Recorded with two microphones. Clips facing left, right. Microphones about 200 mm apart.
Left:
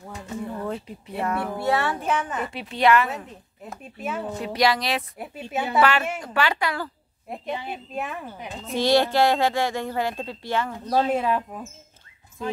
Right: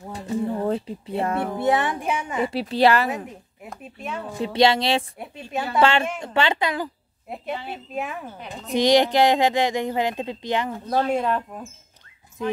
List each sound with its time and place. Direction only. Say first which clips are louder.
0.1 s speech: right 7 dB; 30° right (ahead or behind); by 2.5 s 10° right (ahead or behind)
2.5 s a woman's voice: right 1 dB; 35° right (ahead or behind)
3.7 s speech: left 2 dB; 5° left (ahead or behind)
4.4 s a woman's voice: right 5 dB; 25° right (ahead or behind)
5.2 s speech: even; 5° left (ahead or behind)
5.8 s a woman's voice: right 2 dB; 25° right (ahead or behind)
7.5 s a woman's voice: left 1 dB; 15° left (ahead or behind)
7.9 s speech: right 2 dB; centre (ahead or behind)
8.7 s speech: right 2 dB; 15° right (ahead or behind)
11.1 s speech: even; 5° left (ahead or behind)